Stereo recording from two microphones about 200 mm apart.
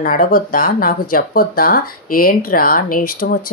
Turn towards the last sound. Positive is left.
turn(degrees=45)  # may be behind; listen again after turning